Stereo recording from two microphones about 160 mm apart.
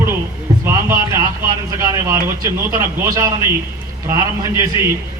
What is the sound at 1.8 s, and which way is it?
A man's voice, 20° right (ahead or behind).